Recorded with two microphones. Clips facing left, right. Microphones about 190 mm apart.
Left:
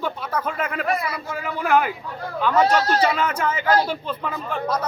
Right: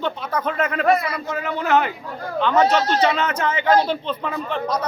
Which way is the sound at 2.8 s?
25° right (ahead or behind).